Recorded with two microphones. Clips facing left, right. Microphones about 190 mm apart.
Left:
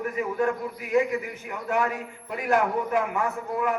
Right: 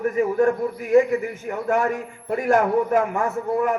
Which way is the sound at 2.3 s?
45° right (ahead or behind).